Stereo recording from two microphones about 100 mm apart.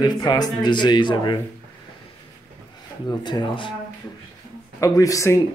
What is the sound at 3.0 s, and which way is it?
Speech, 45° left (ahead or behind).